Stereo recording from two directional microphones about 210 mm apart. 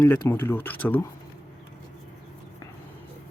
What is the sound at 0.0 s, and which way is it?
Speech, 10° left (ahead or behind).